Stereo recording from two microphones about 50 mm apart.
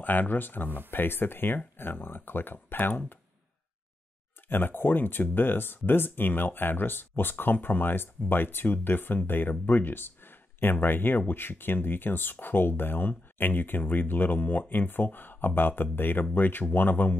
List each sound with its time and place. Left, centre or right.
0.0 s speech: left
4.5 s speech: left